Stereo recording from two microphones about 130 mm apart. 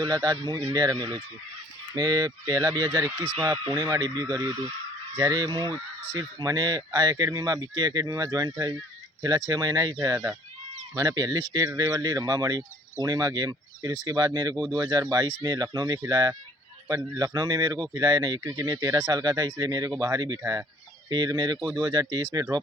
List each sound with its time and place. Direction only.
0.0 s speech: 30° right (ahead or behind)
10.9 s speech: 30° right (ahead or behind)
21.1 s speech: 35° right (ahead or behind)